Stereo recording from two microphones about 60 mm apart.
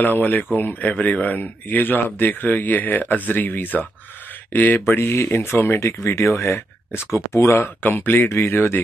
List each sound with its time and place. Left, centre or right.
0.0 s speech: left
7.9 s speech: left